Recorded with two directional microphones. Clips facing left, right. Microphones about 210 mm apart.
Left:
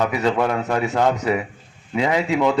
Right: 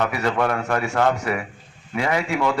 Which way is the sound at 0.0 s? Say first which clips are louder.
Left 2 dB; 20° left (ahead or behind).